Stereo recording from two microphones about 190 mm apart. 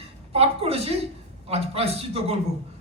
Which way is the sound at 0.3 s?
30° right (ahead or behind).